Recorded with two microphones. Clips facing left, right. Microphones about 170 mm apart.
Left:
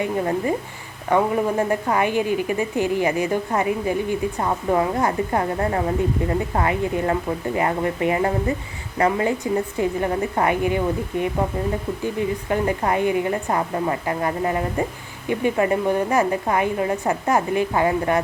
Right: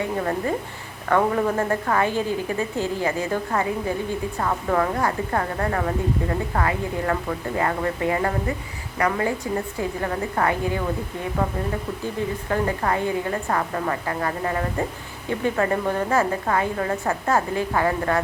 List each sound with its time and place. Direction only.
0.0 s a woman's voice: 20° left (ahead or behind)
12.5 s a woman's voice: 20° left (ahead or behind)